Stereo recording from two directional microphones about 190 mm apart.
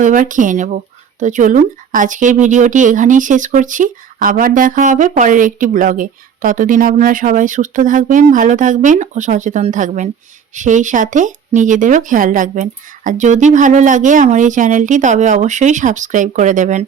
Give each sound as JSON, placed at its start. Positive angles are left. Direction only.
{"t": 0.0, "sound": "a woman's voice", "side_deg": -45}